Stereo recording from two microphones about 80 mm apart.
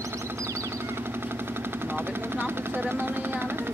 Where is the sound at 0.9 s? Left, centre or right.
Right.